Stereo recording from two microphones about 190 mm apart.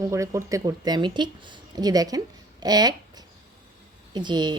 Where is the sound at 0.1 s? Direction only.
15° right (ahead or behind).